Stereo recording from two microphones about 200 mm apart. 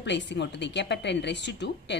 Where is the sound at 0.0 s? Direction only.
60° left (ahead or behind).